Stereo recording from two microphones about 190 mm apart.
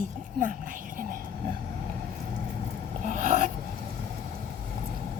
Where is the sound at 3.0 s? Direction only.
45° right (ahead or behind).